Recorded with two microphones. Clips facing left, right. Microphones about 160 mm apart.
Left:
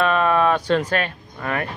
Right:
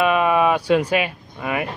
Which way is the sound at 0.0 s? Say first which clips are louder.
Right 1 dB; 10° right (ahead or behind).